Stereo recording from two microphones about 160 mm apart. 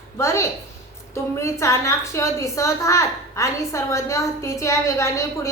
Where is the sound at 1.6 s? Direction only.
20° left (ahead or behind).